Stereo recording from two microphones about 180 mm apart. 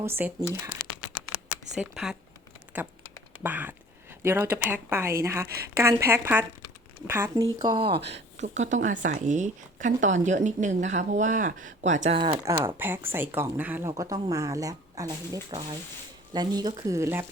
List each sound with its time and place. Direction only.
0.0 s speech: 15° right (ahead or behind)
1.7 s speech: 5° right (ahead or behind)
3.4 s speech: 10° right (ahead or behind)
7.6 s speech: 25° right (ahead or behind)
8.0 s speech: 40° right (ahead or behind)
12.5 s speech: 15° right (ahead or behind)